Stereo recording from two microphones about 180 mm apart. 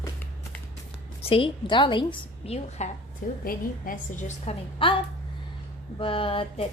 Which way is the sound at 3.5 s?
50° left (ahead or behind).